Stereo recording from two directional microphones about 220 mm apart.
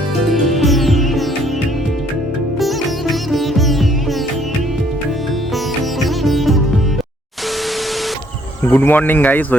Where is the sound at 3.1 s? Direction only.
Centre (ahead or behind).